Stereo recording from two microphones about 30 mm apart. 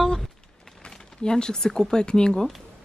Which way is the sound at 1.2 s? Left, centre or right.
Left.